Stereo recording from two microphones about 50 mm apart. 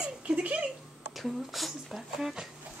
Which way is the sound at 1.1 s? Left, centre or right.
Centre.